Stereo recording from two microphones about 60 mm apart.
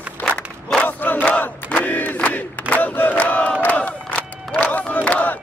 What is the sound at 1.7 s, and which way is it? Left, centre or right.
Battle cry, left.